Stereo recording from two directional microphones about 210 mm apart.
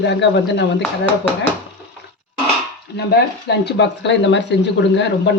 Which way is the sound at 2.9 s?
50° left (ahead or behind).